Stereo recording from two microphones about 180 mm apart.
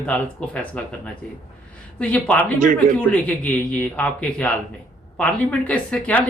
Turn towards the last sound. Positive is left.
turn(degrees=5)  # may be behind; listen again after turning